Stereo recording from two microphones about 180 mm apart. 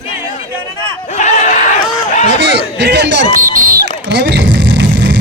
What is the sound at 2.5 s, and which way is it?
Speech, 70° right (ahead or behind).